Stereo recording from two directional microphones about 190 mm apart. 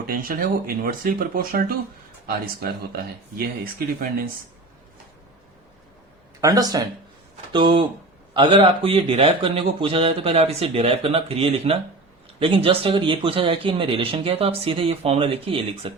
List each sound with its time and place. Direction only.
0.1 s speech: 50° right (ahead or behind)
6.4 s speech: 20° right (ahead or behind)